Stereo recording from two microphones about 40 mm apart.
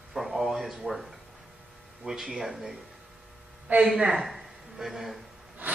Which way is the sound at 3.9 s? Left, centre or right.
Right.